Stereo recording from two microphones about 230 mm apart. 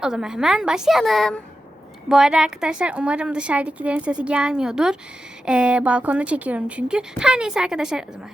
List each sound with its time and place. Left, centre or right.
0.0 s a woman's voice: centre